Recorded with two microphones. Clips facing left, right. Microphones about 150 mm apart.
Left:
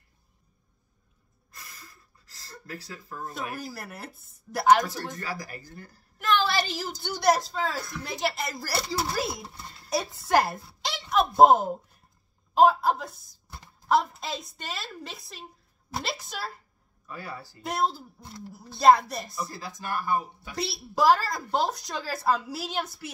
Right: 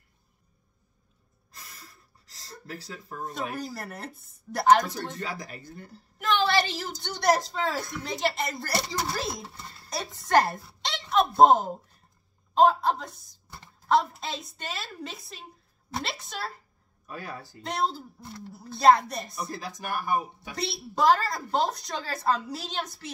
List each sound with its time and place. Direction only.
3.6 s a woman's voice: 5° left (ahead or behind)
5.1 s speech: 25° right (ahead or behind)
6.2 s a woman's voice: centre (ahead or behind)
17.6 s a woman's voice: 5° left (ahead or behind)
19.5 s speech: 15° right (ahead or behind)
20.5 s a woman's voice: 5° left (ahead or behind)